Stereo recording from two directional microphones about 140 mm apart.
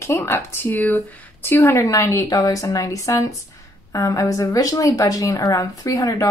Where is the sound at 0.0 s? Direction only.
20° left (ahead or behind).